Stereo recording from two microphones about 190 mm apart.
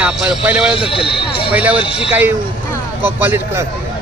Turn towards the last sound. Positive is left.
turn(degrees=-10)  # may be behind; listen again after turning